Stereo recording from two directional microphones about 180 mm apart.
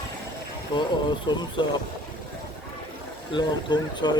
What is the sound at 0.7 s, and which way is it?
Speech, 25° left (ahead or behind).